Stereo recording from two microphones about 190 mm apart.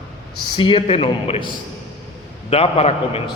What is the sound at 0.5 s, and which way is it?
Speech, 25° left (ahead or behind).